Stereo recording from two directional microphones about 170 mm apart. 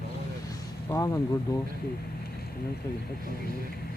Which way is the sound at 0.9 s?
20° left (ahead or behind).